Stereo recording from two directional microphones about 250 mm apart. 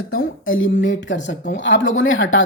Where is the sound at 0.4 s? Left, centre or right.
Left.